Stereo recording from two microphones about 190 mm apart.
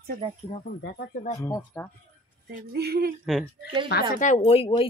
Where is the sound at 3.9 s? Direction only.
60° left (ahead or behind).